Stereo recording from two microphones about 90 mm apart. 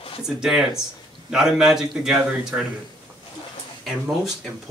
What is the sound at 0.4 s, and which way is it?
A man's voice, 10° right (ahead or behind).